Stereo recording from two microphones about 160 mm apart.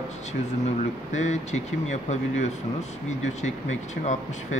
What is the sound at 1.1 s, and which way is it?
Speech, 45° left (ahead or behind).